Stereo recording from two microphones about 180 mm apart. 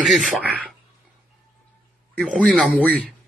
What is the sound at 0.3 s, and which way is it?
Speech, 5° right (ahead or behind).